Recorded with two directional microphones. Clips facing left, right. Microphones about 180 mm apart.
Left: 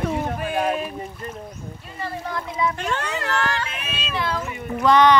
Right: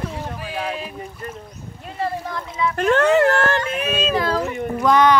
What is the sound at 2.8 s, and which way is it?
Speech, 55° right (ahead or behind).